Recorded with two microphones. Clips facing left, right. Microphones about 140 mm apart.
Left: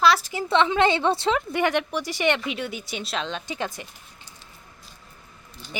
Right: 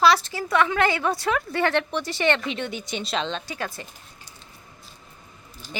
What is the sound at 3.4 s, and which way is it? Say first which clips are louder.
Speech: left 2 dB; 20° left (ahead or behind).